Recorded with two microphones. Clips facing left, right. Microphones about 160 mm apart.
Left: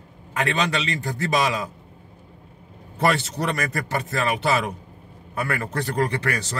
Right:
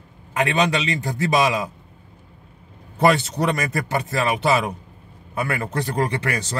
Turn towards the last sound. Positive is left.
turn(degrees=-20)  # may be behind; listen again after turning